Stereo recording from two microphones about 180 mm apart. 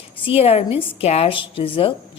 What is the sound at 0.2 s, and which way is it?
A woman's voice, 30° left (ahead or behind).